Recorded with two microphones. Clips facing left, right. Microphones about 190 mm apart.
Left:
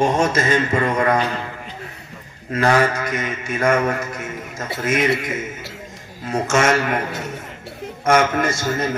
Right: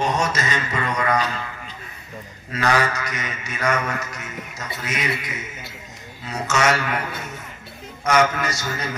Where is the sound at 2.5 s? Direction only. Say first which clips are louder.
Left 4 dB; 50° left (ahead or behind).